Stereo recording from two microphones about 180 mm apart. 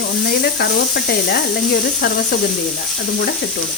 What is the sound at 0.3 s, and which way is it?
Speech, 65° left (ahead or behind).